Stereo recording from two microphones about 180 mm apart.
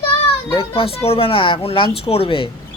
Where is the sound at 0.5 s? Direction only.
30° left (ahead or behind).